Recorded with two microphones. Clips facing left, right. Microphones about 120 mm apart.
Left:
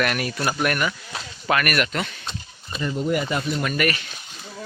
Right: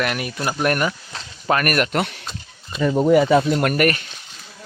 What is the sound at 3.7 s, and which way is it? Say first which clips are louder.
Speech: right 5 dB; 45° right (ahead or behind).